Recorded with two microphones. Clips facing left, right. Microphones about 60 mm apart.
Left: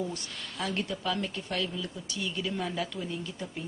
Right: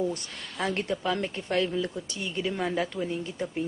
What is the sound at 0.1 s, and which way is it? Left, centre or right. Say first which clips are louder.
Speech: right 3 dB; right.